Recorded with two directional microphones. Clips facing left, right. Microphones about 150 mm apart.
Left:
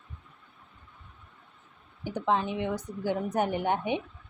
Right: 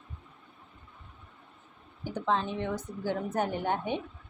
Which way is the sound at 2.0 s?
15° left (ahead or behind).